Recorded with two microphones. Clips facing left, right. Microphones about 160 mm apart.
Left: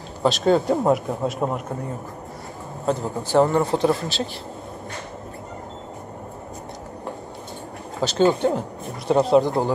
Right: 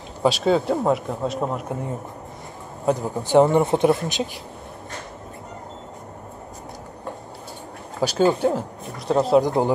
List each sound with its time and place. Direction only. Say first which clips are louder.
0.2 s speech: left 1 dB; 10° right (ahead or behind)
0.6 s speech: left 1 dB; centre (ahead or behind)
2.9 s speech: right 3 dB; 15° right (ahead or behind)
8.0 s speech: even; 10° right (ahead or behind)
9.4 s speech: right 1 dB; 15° right (ahead or behind)